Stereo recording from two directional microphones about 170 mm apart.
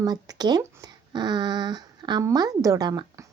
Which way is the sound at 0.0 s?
20° right (ahead or behind).